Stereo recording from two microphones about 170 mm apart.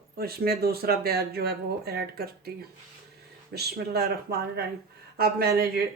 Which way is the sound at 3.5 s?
70° right (ahead or behind).